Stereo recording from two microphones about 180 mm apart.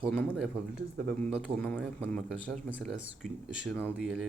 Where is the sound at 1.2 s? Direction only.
5° left (ahead or behind).